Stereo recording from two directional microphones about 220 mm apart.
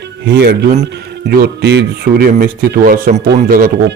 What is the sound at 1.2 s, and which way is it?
Speech, 50° right (ahead or behind).